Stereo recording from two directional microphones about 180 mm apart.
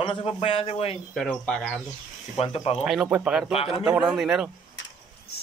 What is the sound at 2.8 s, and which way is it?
A man's voice, 5° right (ahead or behind).